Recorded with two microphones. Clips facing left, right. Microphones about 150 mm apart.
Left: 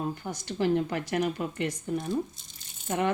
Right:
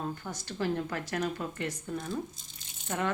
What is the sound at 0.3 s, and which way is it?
Speech, 20° left (ahead or behind).